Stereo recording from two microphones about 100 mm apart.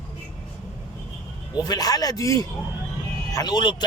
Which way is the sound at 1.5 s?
40° left (ahead or behind).